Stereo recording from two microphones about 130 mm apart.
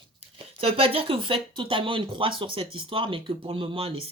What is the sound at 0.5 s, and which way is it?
Speech, 45° right (ahead or behind).